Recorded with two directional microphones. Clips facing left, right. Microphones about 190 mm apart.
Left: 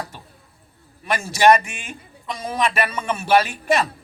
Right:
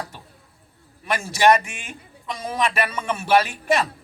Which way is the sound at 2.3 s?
30° left (ahead or behind).